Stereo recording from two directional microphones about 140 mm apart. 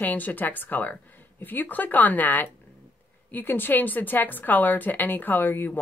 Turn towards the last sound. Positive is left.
turn(degrees=15)  # may be behind; listen again after turning